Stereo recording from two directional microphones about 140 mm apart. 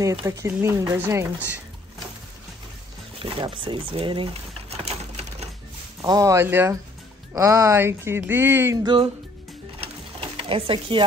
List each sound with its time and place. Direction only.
0.0 s speech: 25° right (ahead or behind)
3.2 s a sound: 40° right (ahead or behind)
6.0 s speech: 25° right (ahead or behind)
8.8 s speech: 40° right (ahead or behind)
10.3 s speech: 40° right (ahead or behind)